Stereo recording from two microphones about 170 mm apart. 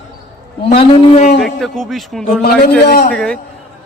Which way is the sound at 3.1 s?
Centre (ahead or behind).